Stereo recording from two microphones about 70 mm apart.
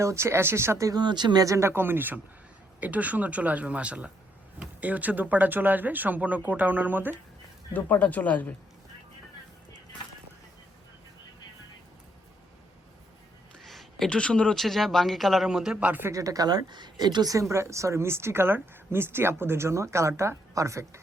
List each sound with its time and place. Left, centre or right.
0.0 s speech: right
0.9 s speech: right
1.5 s speech: right
1.7 s speech: right
7.7 s speech: left
13.7 s a sound: centre
14.1 s speech: centre
15.4 s speech: centre
15.8 s speech: right
16.0 s a woman's voice: right
17.5 s speech: right